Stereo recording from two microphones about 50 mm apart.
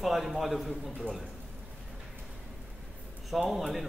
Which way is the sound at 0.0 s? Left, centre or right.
Centre.